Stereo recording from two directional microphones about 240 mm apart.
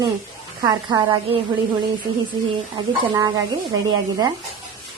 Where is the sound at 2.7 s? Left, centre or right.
Centre.